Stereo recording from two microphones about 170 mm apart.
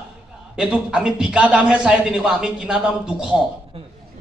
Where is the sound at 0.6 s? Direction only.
5° right (ahead or behind).